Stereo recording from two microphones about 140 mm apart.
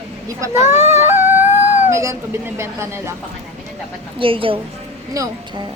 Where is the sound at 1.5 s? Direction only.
60° left (ahead or behind).